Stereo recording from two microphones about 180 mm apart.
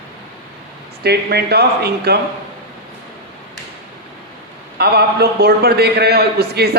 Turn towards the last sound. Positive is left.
turn(degrees=-60)  # may be behind; listen again after turning